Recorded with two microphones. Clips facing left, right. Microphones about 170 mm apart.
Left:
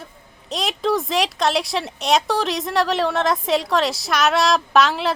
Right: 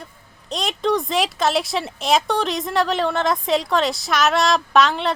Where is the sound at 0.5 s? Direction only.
Centre (ahead or behind).